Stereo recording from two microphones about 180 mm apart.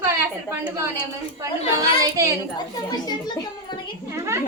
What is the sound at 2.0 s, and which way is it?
Speech, 20° right (ahead or behind).